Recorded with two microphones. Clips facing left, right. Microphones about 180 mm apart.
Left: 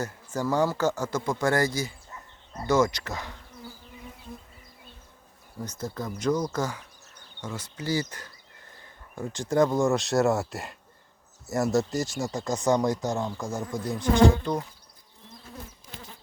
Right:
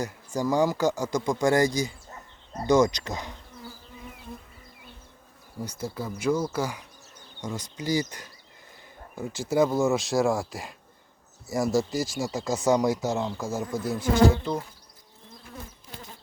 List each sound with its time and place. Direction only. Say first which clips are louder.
0.0 s speech: right 1 dB; 15° right (ahead or behind)
5.5 s speech: right 1 dB; 10° right (ahead or behind)
13.6 s speech: right 2 dB; 15° left (ahead or behind)